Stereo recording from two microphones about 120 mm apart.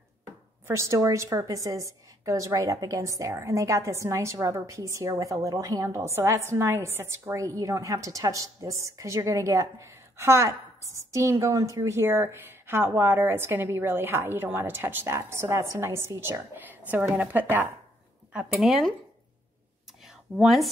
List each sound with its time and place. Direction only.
0.7 s a woman's voice: 25° right (ahead or behind)
18.3 s speech: 5° right (ahead or behind)
20.3 s speech: centre (ahead or behind)